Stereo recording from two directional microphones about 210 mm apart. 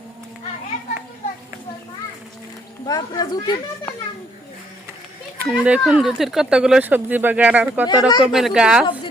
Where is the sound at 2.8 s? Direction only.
20° left (ahead or behind).